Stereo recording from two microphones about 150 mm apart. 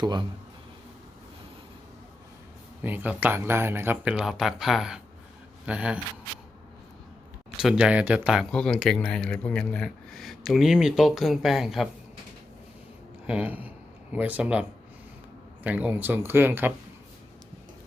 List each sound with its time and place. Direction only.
0.0 s speech: 30° right (ahead or behind)
2.8 s speech: 10° right (ahead or behind)
7.6 s speech: 5° right (ahead or behind)
13.2 s speech: 10° right (ahead or behind)